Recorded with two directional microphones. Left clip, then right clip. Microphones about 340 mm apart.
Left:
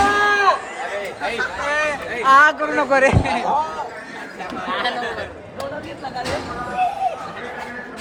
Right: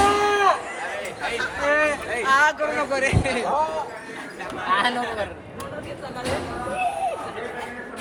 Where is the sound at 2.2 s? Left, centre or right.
Left.